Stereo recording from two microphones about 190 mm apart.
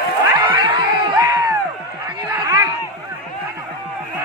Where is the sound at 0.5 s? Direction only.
25° right (ahead or behind).